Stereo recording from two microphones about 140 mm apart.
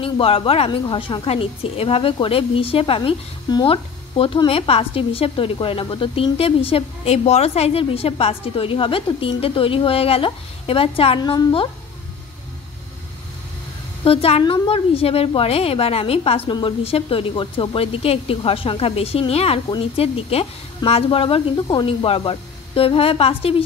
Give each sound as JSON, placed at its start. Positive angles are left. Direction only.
{"t": 0.0, "sound": "a woman's voice", "side_deg": 40}
{"t": 14.0, "sound": "a woman's voice", "side_deg": 45}